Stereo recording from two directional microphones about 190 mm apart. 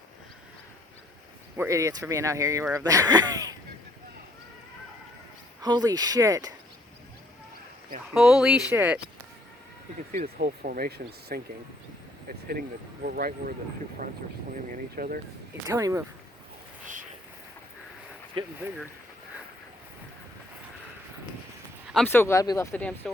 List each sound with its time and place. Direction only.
1.5 s speech: 15° right (ahead or behind)
5.6 s speech: 20° right (ahead or behind)
8.1 s speech: centre (ahead or behind)
10.3 s speech: 55° right (ahead or behind)
12.5 s speech: 50° right (ahead or behind)
14.9 s speech: 50° right (ahead or behind)
15.6 s speech: 15° right (ahead or behind)
16.8 s a sound: 45° right (ahead or behind)
21.9 s speech: 10° left (ahead or behind)